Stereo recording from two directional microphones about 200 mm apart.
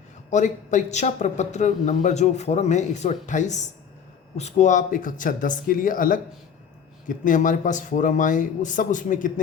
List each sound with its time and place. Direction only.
0.3 s speech: 40° left (ahead or behind)